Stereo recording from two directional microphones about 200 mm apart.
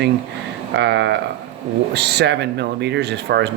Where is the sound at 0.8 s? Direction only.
60° right (ahead or behind).